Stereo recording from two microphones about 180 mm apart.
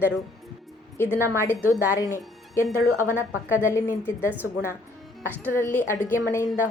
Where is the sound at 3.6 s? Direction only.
15° left (ahead or behind).